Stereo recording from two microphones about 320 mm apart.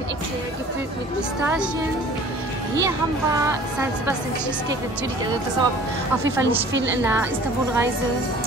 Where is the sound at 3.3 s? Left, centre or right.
Centre.